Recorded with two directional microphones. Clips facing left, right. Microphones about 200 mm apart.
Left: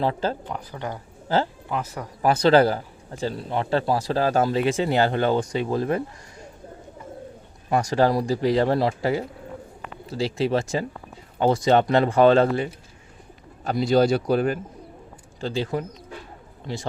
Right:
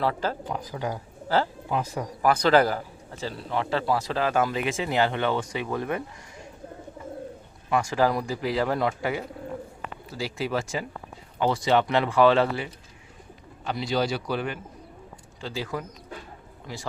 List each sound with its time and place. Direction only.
0.0 s speech: 30° left (ahead or behind)
0.4 s speech: 10° right (ahead or behind)
2.2 s a man's voice: 25° left (ahead or behind)
7.7 s a man's voice: 40° left (ahead or behind)
10.3 s a man's voice: 30° left (ahead or behind)
15.4 s speech: 30° left (ahead or behind)